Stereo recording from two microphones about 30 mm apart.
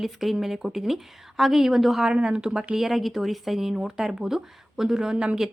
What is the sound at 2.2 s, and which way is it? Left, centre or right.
Speech, right.